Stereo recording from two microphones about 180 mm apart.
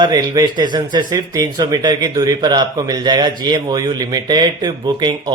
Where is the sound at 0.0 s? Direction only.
20° right (ahead or behind).